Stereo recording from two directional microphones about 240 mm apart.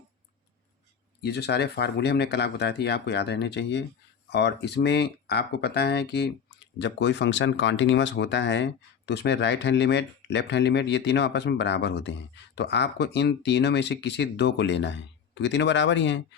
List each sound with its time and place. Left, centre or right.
1.2 s speech: left